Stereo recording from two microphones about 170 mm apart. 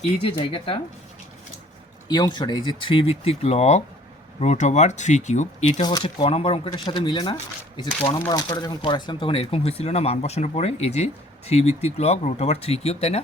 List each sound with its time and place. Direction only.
0.0 s speech: 30° left (ahead or behind)
2.0 s speech: 25° left (ahead or behind)